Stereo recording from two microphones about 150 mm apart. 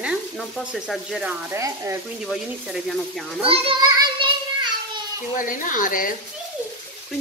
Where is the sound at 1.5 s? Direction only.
20° right (ahead or behind).